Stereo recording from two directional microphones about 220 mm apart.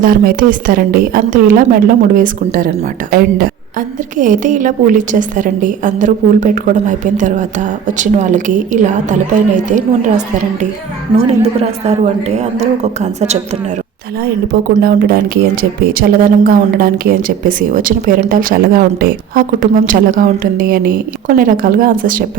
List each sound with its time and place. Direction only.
0.0 s a woman's voice: 40° right (ahead or behind)
14.4 s a woman's voice: 45° right (ahead or behind)